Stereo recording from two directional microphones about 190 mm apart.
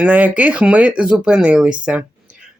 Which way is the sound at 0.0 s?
10° right (ahead or behind).